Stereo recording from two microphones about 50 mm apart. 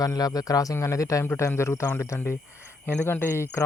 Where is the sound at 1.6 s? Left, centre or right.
Left.